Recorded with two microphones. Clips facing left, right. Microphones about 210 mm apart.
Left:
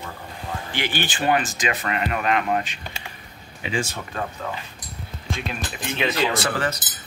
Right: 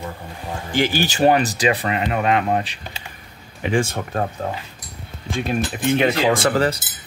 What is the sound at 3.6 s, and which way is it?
Speech, 55° right (ahead or behind).